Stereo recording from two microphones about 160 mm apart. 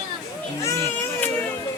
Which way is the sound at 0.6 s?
15° left (ahead or behind).